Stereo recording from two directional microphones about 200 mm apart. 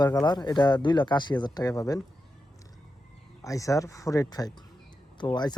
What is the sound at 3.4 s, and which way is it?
Speech, 15° left (ahead or behind).